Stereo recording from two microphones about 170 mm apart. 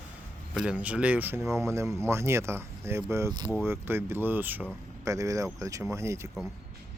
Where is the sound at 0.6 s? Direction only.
5° right (ahead or behind).